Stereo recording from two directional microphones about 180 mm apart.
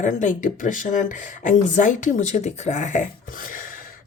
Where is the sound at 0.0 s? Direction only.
45° left (ahead or behind).